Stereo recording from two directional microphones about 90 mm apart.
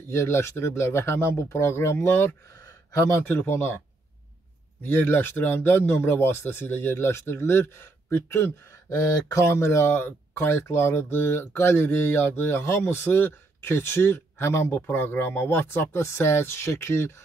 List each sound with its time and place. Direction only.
0.1 s speech: 30° left (ahead or behind)
4.8 s speech: 20° left (ahead or behind)
8.8 s speech: 40° left (ahead or behind)
9.4 s speech: 30° left (ahead or behind)